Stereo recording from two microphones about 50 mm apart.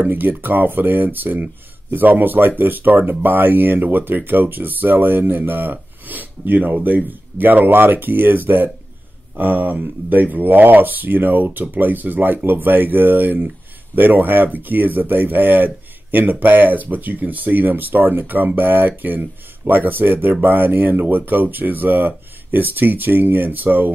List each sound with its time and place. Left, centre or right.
0.0 s speech: right